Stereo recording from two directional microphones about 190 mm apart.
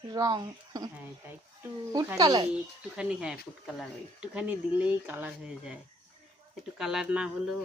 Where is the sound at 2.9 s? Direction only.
5° right (ahead or behind).